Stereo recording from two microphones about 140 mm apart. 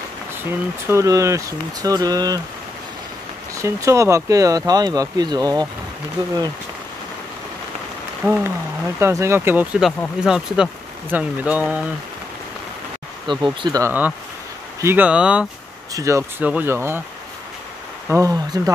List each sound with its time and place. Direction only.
0.8 s speech: 20° right (ahead or behind)
3.5 s speech: 20° right (ahead or behind)
8.3 s speech: 20° right (ahead or behind)
13.3 s speech: 35° right (ahead or behind)
14.8 s speech: 15° right (ahead or behind)
15.9 s speech: 20° right (ahead or behind)
18.1 s speech: 25° right (ahead or behind)